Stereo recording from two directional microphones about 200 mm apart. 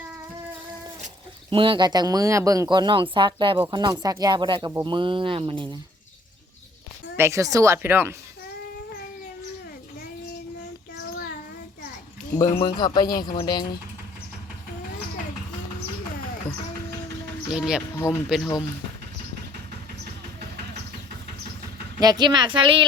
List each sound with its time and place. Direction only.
1.5 s speech: 25° right (ahead or behind)
7.2 s speech: 15° right (ahead or behind)
12.6 s speech: 20° left (ahead or behind)
13.1 s speech: 45° left (ahead or behind)
13.3 s speech: 20° left (ahead or behind)
17.5 s speech: 5° right (ahead or behind)
17.9 s speech: 15° left (ahead or behind)
18.3 s speech: centre (ahead or behind)
22.0 s speech: 20° right (ahead or behind)